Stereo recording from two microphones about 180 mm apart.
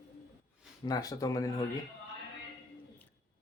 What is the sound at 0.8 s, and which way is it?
Speech, 20° left (ahead or behind).